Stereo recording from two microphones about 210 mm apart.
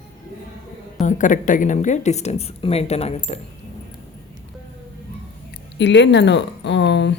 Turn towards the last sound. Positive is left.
turn(degrees=55)  # may be behind; listen again after turning